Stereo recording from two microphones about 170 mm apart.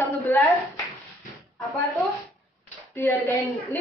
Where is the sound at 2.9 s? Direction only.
10° left (ahead or behind).